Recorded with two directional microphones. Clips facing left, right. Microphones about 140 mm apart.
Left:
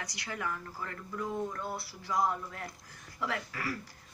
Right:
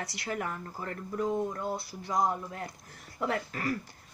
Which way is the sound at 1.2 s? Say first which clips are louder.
Right 5 dB; 20° right (ahead or behind).